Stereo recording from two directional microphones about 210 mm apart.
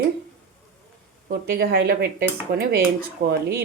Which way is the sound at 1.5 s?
45° right (ahead or behind).